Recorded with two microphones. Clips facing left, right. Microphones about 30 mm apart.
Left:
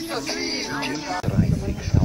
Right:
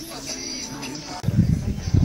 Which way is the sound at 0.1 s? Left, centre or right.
Left.